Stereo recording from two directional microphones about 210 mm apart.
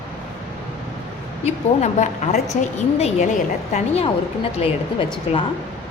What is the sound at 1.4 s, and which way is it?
A woman's voice, 35° left (ahead or behind).